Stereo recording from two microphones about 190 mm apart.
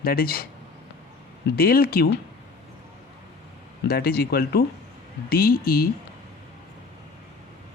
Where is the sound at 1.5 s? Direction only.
50° left (ahead or behind).